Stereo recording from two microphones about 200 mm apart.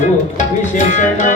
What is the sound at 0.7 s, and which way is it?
Music, 40° left (ahead or behind).